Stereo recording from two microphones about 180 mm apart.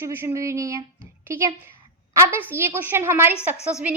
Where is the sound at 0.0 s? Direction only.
10° right (ahead or behind).